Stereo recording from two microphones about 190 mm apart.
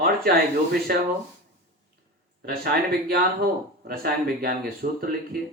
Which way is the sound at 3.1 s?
55° right (ahead or behind).